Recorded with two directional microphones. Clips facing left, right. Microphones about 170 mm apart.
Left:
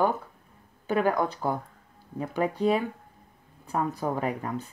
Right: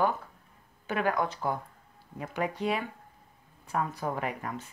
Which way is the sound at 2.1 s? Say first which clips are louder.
Left 5 dB; 35° left (ahead or behind).